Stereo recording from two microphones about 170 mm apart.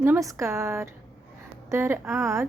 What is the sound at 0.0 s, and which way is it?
A woman's voice, 15° right (ahead or behind).